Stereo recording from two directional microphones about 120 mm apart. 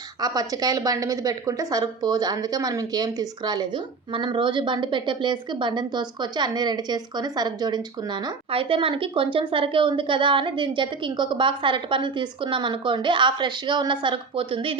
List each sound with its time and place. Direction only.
0.2 s a woman's voice: 30° right (ahead or behind)
8.4 s a woman's voice: 50° right (ahead or behind)